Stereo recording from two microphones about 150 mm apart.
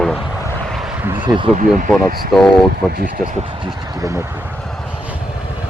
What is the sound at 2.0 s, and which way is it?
Speech, 70° right (ahead or behind).